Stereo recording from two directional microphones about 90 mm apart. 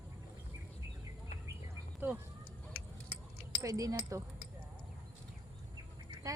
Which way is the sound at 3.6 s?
40° right (ahead or behind).